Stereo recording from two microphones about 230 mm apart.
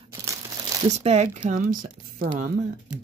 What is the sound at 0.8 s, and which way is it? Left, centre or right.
Speech, right.